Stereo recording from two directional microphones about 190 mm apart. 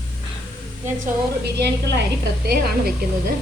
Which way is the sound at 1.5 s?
60° right (ahead or behind).